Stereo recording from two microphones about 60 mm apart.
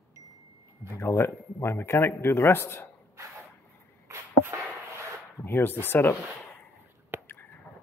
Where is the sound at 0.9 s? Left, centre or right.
Left.